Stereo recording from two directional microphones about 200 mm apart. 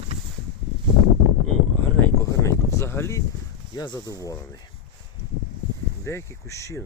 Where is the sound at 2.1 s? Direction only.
15° left (ahead or behind).